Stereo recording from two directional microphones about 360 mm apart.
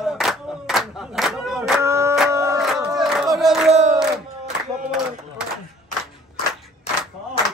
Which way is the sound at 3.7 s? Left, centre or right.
Centre.